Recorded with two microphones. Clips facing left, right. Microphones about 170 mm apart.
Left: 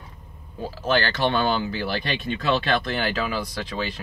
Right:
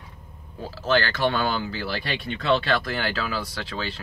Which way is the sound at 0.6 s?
15° left (ahead or behind).